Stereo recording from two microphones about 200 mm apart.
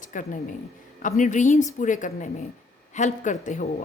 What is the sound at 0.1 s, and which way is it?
A woman's voice, 40° left (ahead or behind).